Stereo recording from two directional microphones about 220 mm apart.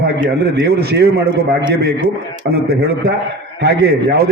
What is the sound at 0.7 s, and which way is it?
Speech, 50° right (ahead or behind).